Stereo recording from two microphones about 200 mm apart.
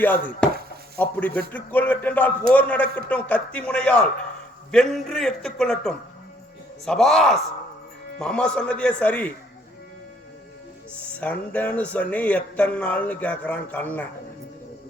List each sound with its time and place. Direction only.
0.0 s a man's voice: 10° left (ahead or behind)
10.9 s speech: 5° left (ahead or behind)